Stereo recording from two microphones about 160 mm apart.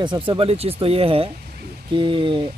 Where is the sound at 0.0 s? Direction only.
30° right (ahead or behind).